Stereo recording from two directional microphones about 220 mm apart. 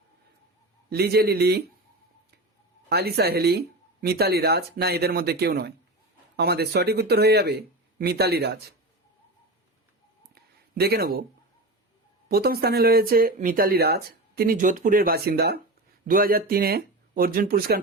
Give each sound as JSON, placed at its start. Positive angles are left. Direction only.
{"t": 0.9, "sound": "speech", "side_deg": -45}
{"t": 2.9, "sound": "speech", "side_deg": -45}
{"t": 10.3, "sound": "a sound", "side_deg": -45}
{"t": 12.3, "sound": "speech", "side_deg": -45}